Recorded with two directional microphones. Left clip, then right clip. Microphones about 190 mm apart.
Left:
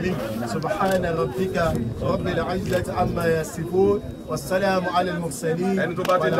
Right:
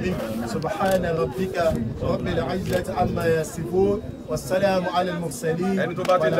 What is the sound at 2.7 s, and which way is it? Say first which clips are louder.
A man's voice: right 1 dB; 35° right (ahead or behind).